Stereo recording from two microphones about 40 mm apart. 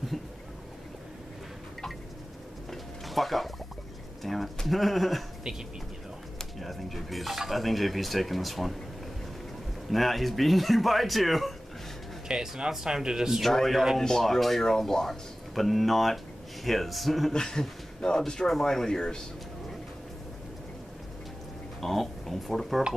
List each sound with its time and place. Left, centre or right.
2.7 s a sound: centre
4.2 s speech: centre
6.6 s speech: centre
9.8 s speech: centre
12.3 s speech: centre
13.4 s speech: centre
17.3 s speech: centre
21.8 s speech: centre